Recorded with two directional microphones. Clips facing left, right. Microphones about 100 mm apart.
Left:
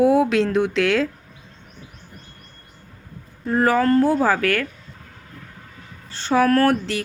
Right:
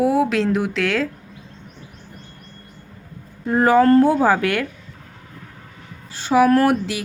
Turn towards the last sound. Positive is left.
turn(degrees=-10)  # may be behind; listen again after turning